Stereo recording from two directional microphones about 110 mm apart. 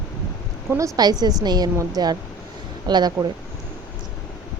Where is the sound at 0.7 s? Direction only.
35° right (ahead or behind).